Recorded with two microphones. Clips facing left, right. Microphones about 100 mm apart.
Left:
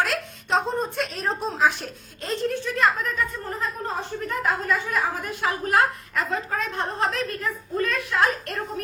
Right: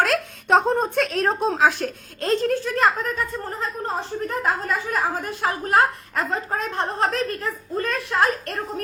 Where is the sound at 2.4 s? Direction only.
40° right (ahead or behind).